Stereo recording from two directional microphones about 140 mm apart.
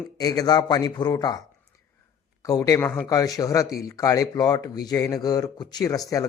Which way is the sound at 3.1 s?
25° left (ahead or behind).